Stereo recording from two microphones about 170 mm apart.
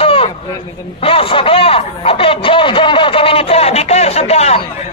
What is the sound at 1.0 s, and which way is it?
A man's voice, 35° left (ahead or behind).